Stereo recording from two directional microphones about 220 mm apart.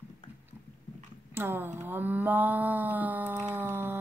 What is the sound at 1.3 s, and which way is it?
Speech, 10° right (ahead or behind).